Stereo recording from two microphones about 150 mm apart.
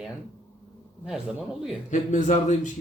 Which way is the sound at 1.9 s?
55° left (ahead or behind).